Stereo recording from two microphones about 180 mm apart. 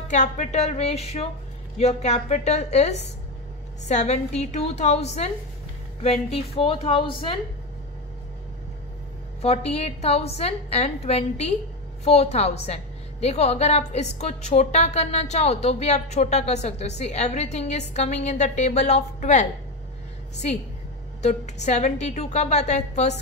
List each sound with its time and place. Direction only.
0.1 s a woman's voice: 40° left (ahead or behind)
9.4 s a woman's voice: 35° left (ahead or behind)
21.2 s a woman's voice: 40° left (ahead or behind)